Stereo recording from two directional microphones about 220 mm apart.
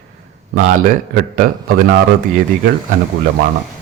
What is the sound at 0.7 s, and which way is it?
A man's voice, 40° right (ahead or behind).